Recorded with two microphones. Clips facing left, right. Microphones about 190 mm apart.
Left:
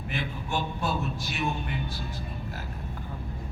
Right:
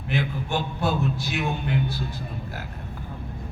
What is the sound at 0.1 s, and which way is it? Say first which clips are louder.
A man's voice: right 6 dB; 70° right (ahead or behind).